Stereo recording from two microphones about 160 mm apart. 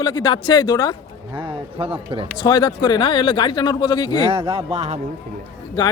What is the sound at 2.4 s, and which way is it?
Speech, 30° left (ahead or behind).